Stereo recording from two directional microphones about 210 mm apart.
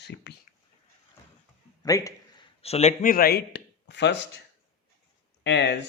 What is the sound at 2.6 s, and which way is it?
A man's voice, 30° left (ahead or behind).